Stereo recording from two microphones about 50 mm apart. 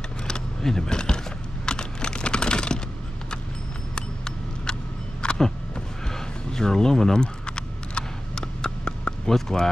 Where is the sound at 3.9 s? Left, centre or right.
Centre.